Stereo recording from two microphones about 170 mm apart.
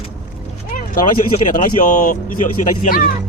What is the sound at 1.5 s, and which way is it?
Speech, 50° left (ahead or behind).